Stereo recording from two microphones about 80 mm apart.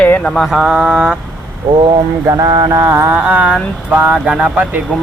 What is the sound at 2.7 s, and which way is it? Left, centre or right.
Speech, right.